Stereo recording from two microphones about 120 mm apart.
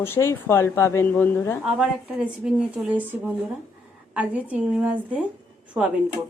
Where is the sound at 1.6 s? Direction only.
5° right (ahead or behind).